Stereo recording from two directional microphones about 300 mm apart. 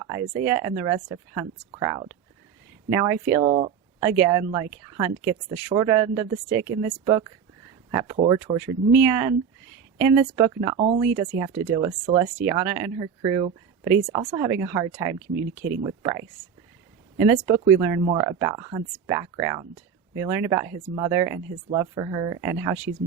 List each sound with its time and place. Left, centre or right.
0.0 s speech: centre